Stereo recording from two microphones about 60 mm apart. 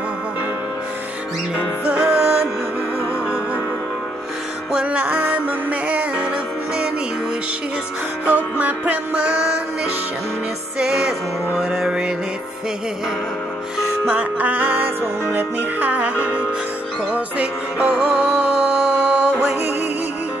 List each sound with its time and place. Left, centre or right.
1.9 s music: centre
4.7 s music: right
8.5 s music: right
10.8 s music: centre
14.0 s music: right